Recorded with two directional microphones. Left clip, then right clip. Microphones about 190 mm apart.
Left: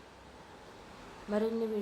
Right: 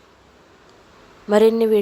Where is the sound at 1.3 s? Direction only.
50° right (ahead or behind).